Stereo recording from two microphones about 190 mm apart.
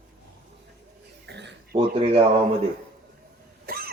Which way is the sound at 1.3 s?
65° right (ahead or behind).